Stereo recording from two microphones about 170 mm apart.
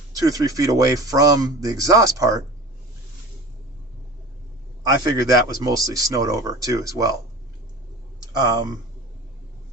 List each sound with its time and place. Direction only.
0.3 s speech: 20° right (ahead or behind)
4.8 s speech: 20° right (ahead or behind)
8.3 s speech: 25° right (ahead or behind)